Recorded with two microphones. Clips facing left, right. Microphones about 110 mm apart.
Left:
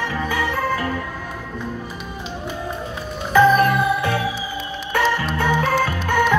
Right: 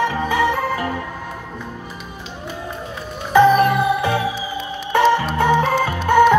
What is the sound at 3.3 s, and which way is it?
Music, 25° right (ahead or behind).